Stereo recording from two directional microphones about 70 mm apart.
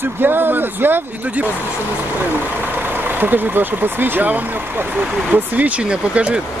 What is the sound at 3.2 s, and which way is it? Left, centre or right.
Speech, right.